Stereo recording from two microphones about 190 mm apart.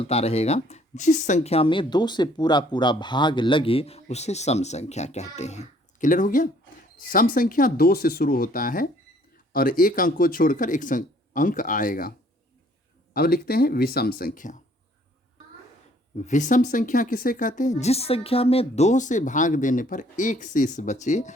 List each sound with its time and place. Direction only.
0.0 s speech: 35° left (ahead or behind)
13.1 s speech: 55° left (ahead or behind)
16.1 s speech: 40° left (ahead or behind)